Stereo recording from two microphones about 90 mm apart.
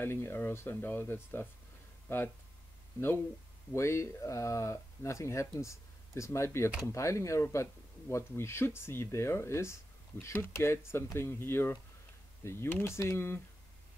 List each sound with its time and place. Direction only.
0.0 s speech: 25° left (ahead or behind)
3.7 s speech: 30° left (ahead or behind)